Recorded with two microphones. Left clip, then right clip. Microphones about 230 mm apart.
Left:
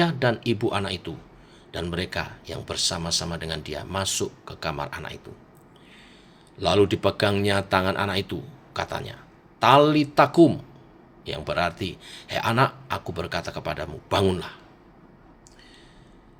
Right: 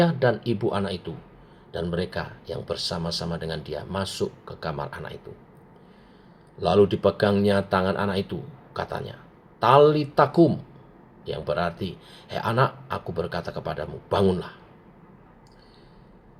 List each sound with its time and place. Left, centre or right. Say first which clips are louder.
0.0 s speech: right 1 dB; left
6.6 s speech: right 1 dB; left